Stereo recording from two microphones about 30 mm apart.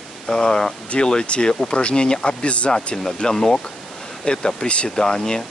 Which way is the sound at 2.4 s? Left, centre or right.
Left.